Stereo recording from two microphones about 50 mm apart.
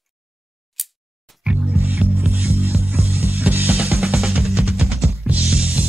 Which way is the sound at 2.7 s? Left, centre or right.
Right.